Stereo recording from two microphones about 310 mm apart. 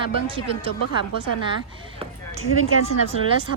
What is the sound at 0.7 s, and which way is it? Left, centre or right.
Speech, left.